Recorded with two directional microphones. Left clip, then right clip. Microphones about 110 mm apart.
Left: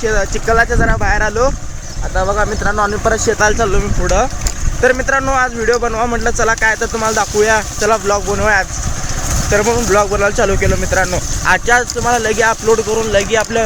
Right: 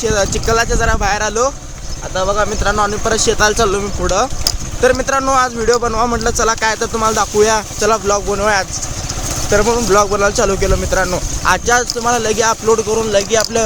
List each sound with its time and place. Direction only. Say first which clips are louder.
0.0 s speech: even; 15° right (ahead or behind)
2.1 s speech: even; 20° left (ahead or behind)
2.7 s speech: left 3 dB; 50° left (ahead or behind)
3.3 s speech: even; 20° right (ahead or behind)
7.8 s speech: even; 15° right (ahead or behind)
12.9 s speech: even; 30° right (ahead or behind)